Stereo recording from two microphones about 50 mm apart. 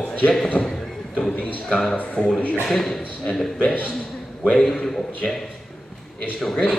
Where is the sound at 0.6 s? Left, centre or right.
Centre.